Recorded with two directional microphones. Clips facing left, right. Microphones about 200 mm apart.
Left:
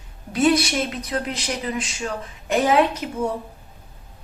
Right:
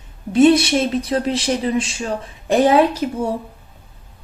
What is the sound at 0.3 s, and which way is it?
A woman's voice, 25° right (ahead or behind).